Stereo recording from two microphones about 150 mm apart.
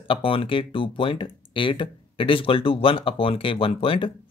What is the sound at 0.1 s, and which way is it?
Speech, 35° left (ahead or behind).